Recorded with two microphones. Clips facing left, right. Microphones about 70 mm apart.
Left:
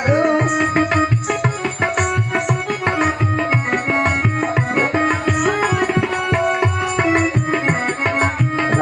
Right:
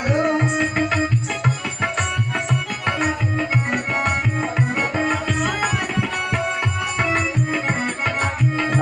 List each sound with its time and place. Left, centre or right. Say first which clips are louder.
0.1 s music: left 4 dB; left
0.3 s music: left 4 dB; left
2.8 s tabla: left 4 dB; left
5.5 s tabla: left 5 dB; left
6.5 s music: left 5 dB; left
7.1 s music: left 5 dB; left
8.0 s tabla: left 3 dB; left